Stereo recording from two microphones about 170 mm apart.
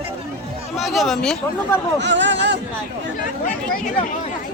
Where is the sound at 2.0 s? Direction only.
90° right.